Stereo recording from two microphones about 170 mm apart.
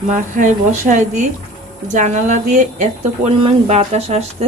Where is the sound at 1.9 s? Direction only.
45° right (ahead or behind).